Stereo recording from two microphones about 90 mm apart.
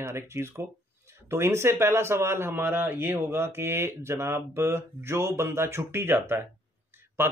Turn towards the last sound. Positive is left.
turn(degrees=-25)  # may be behind; listen again after turning